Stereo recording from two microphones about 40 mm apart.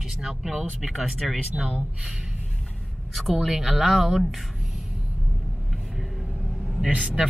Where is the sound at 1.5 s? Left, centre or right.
Right.